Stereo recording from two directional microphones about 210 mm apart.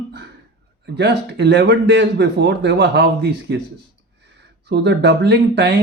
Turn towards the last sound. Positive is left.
turn(degrees=-55)  # may be behind; listen again after turning